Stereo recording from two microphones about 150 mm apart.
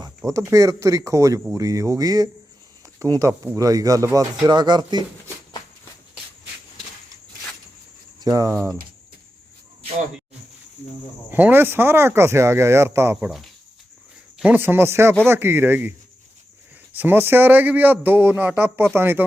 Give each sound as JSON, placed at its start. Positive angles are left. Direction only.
{"t": 0.3, "sound": "speech", "side_deg": -20}
{"t": 8.2, "sound": "speech", "side_deg": -25}
{"t": 11.3, "sound": "a man's voice", "side_deg": -15}
{"t": 13.1, "sound": "a man's voice", "side_deg": -5}